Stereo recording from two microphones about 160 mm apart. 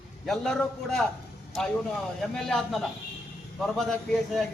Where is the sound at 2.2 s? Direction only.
Centre (ahead or behind).